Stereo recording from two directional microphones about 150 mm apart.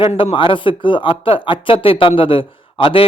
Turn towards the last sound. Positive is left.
turn(degrees=35)  # may be behind; listen again after turning